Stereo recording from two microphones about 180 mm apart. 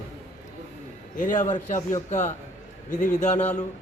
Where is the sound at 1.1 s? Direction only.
45° left (ahead or behind).